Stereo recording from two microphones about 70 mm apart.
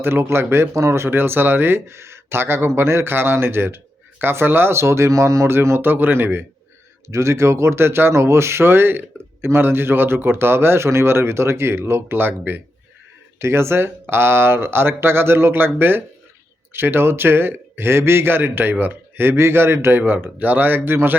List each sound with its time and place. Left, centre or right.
0.0 s speech: right
7.1 s speech: right
20.0 s speech: right